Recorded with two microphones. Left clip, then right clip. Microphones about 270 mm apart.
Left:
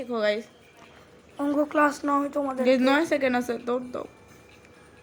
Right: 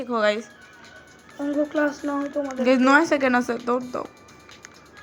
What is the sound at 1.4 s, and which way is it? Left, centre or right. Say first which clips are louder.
Speech: left 1 dB; left.